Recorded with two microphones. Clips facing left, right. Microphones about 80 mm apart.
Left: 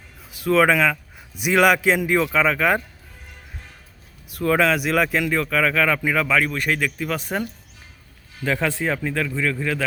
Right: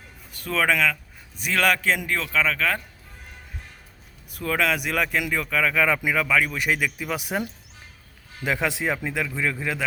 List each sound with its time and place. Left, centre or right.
0.3 s a man's voice: centre
4.3 s speech: centre
5.8 s speech: centre